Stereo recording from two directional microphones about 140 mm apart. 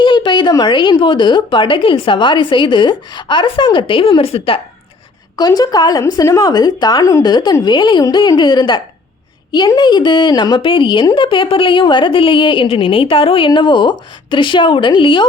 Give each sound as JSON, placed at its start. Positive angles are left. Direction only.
{"t": 0.0, "sound": "a woman's voice", "side_deg": 35}
{"t": 5.4, "sound": "a woman's voice", "side_deg": 30}